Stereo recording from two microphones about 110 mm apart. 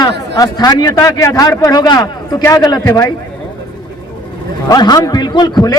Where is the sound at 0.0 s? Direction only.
35° left (ahead or behind).